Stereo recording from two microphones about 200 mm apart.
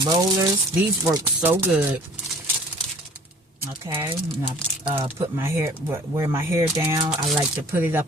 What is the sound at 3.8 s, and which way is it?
Speech, 10° right (ahead or behind).